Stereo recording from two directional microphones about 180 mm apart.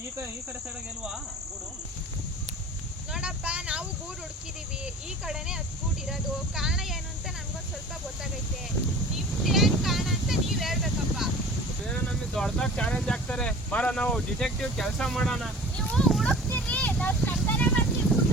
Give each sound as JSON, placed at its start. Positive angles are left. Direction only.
{"t": 3.1, "sound": "speech", "side_deg": -5}
{"t": 5.2, "sound": "speech", "side_deg": -5}
{"t": 6.6, "sound": "speech", "side_deg": 0}
{"t": 9.1, "sound": "a sound", "side_deg": 0}
{"t": 11.9, "sound": "speech", "side_deg": 5}